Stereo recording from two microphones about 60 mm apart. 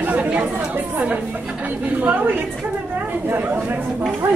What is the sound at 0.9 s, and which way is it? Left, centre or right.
A woman's voice, right.